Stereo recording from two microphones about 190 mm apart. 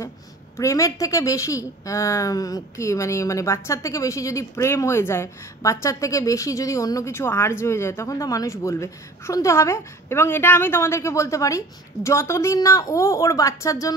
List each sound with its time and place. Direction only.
0.6 s a woman's voice: 15° left (ahead or behind)